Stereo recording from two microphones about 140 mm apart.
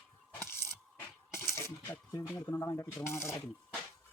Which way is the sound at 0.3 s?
15° left (ahead or behind).